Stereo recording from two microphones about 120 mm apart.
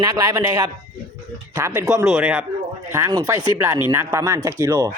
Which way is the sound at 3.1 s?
30° right (ahead or behind).